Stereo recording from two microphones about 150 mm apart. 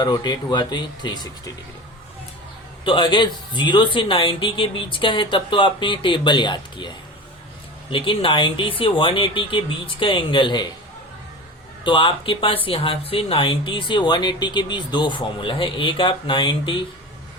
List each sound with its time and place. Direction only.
0.0 s speech: 30° left (ahead or behind)
2.8 s speech: 35° left (ahead or behind)
11.9 s speech: 35° left (ahead or behind)